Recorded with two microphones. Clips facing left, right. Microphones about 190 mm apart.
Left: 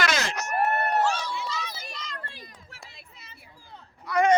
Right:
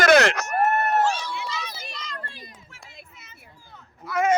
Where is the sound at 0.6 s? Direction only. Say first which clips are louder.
Right 2 dB; 45° right (ahead or behind).